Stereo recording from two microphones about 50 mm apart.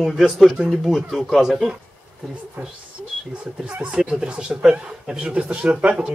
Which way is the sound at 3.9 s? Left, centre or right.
Centre.